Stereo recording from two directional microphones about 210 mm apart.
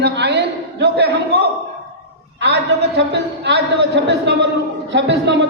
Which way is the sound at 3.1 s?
55° right (ahead or behind).